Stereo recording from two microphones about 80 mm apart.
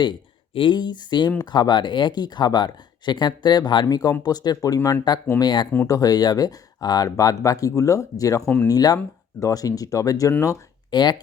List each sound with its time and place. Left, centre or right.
0.0 s speech: left
5.4 s speech: left
5.9 s speech: left
10.9 s speech: left